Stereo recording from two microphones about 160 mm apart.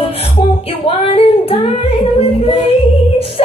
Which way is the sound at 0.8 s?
35° left (ahead or behind).